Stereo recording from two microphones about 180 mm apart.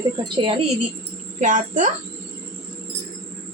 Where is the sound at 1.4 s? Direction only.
45° right (ahead or behind).